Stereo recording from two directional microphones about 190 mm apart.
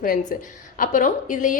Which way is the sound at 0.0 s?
45° left (ahead or behind).